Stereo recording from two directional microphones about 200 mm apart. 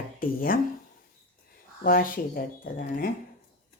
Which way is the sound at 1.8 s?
45° left (ahead or behind).